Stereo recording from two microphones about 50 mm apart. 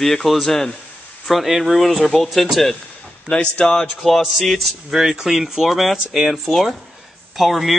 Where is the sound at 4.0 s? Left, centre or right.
Centre.